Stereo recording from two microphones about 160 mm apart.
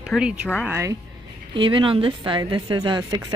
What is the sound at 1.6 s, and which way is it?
Speech, 30° right (ahead or behind).